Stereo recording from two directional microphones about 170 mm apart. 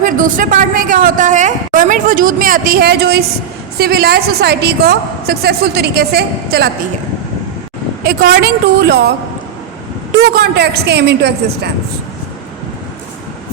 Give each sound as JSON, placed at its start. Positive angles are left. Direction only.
{"t": 0.0, "sound": "a woman's voice", "side_deg": -50}
{"t": 8.0, "sound": "a woman's voice", "side_deg": -65}